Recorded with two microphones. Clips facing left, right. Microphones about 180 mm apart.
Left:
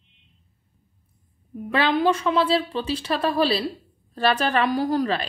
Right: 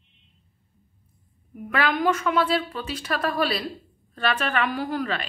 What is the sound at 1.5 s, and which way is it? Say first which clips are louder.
A woman's voice: left 3 dB; 30° left (ahead or behind).